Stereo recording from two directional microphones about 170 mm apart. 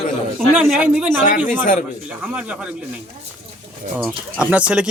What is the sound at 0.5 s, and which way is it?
Speech, 5° right (ahead or behind).